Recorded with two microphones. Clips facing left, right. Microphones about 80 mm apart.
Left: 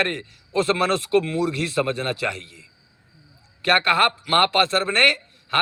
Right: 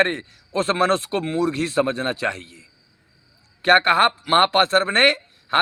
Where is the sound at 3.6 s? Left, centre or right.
Right.